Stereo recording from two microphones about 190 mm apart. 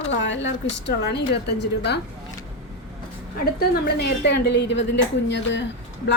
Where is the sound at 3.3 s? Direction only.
50° left (ahead or behind); by 5.6 s 65° left (ahead or behind).